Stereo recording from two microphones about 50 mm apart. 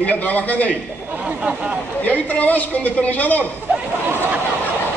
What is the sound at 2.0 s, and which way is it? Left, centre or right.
A man's voice, left.